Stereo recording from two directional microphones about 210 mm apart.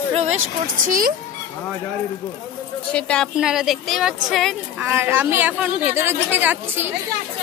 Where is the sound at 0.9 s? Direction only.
40° right (ahead or behind).